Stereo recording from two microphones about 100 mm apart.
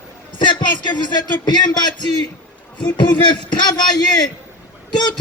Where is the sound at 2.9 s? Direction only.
50° left (ahead or behind).